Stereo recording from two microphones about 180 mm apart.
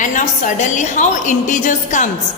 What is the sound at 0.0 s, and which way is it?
A woman's voice, 45° left (ahead or behind).